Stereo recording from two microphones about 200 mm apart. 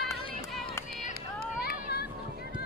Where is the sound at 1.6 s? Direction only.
50° left (ahead or behind).